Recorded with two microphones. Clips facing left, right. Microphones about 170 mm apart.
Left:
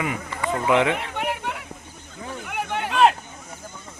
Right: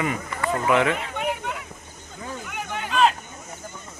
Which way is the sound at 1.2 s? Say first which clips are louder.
Even; 65° left (ahead or behind).